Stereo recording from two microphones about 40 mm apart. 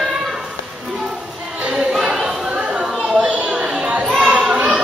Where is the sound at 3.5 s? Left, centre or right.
Centre.